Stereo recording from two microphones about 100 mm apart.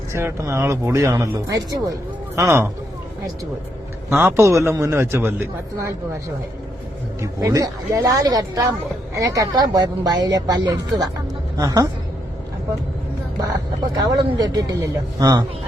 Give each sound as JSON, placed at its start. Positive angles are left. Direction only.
{"t": 0.1, "sound": "a man's voice", "side_deg": -25}
{"t": 4.2, "sound": "a man's voice", "side_deg": -25}
{"t": 7.2, "sound": "speech", "side_deg": -35}
{"t": 13.9, "sound": "speech", "side_deg": -40}